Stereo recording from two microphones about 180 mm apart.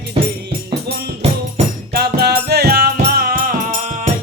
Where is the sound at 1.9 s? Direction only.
60° right (ahead or behind).